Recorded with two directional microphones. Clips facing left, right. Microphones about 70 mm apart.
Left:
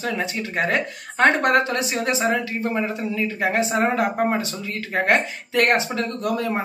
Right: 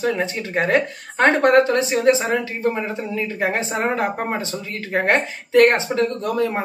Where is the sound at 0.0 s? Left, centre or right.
Right.